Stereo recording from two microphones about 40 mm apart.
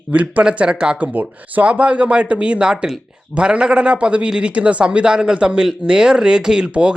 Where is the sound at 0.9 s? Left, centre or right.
Right.